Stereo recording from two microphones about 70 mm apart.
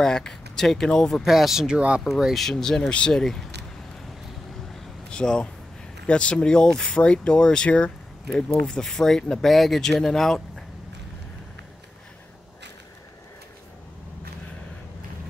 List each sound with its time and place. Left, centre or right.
0.0 s speech: centre
1.2 s speech: centre
2.0 s speech: centre
5.1 s speech: centre